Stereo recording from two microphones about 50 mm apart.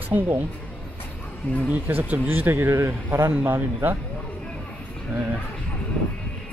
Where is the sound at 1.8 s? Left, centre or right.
Right.